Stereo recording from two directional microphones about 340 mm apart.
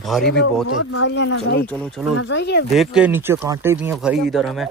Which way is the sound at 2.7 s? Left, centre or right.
Centre.